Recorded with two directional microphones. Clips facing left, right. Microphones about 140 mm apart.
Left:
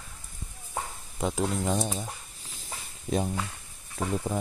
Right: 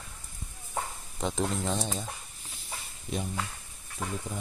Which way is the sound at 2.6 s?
40° left (ahead or behind).